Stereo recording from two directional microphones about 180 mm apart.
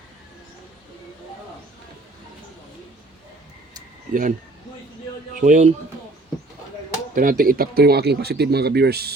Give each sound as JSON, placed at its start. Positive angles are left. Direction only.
{"t": 4.1, "sound": "a man's voice", "side_deg": -50}
{"t": 7.1, "sound": "speech", "side_deg": -50}